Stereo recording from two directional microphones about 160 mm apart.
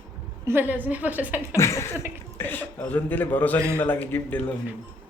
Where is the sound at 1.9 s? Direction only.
15° right (ahead or behind).